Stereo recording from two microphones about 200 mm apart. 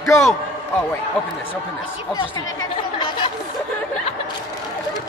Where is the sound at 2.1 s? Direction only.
20° left (ahead or behind).